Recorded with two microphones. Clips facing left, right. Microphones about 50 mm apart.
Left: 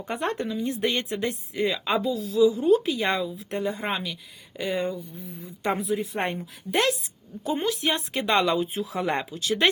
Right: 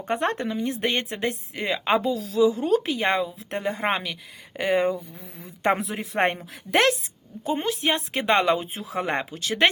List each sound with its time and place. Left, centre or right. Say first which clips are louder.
0.0 s a woman's voice: right 3 dB; right
3.8 s speech: right 4 dB; right
5.1 s a woman's voice: left 3 dB; right
5.6 s a woman's voice: right 2 dB; right
7.4 s speech: right 1 dB; right